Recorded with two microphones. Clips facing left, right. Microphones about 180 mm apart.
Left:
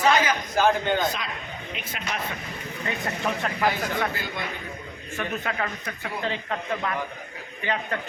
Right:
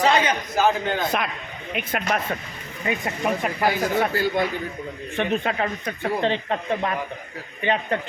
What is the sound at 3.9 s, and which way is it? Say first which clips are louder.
Speech: right 8 dB; 40° right (ahead or behind).